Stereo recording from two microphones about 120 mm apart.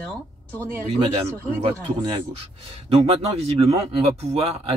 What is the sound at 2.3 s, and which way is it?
Speech, 55° right (ahead or behind).